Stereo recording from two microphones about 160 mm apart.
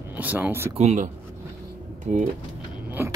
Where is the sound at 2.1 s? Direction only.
55° right (ahead or behind).